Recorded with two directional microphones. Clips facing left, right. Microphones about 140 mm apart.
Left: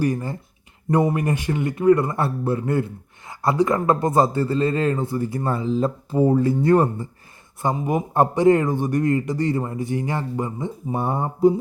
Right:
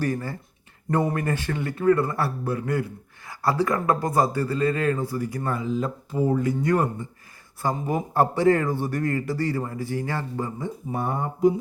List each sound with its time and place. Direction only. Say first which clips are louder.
0.0 s a man's voice: left 4 dB; 15° left (ahead or behind)
7.6 s a man's voice: left 3 dB; 20° left (ahead or behind)